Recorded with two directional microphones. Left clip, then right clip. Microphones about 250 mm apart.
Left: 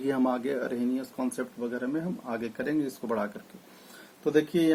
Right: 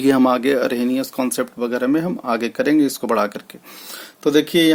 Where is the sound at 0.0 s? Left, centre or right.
Right.